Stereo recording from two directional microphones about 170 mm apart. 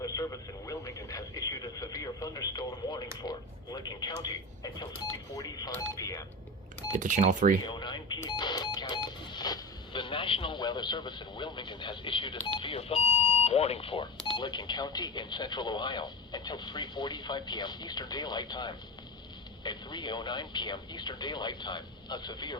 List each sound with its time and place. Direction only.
0.0 s radio: 20° left (ahead or behind)
3.2 s a sound: 25° left (ahead or behind)
7.0 s speech: 50° right (ahead or behind)
7.6 s cash register: 25° left (ahead or behind)
12.5 s smoke detector: 30° left (ahead or behind)
14.3 s speech: 25° left (ahead or behind)